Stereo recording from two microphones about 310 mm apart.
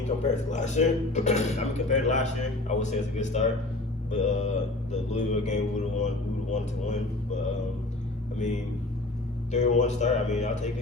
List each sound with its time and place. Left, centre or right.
0.3 s speech: left
8.4 s speech: left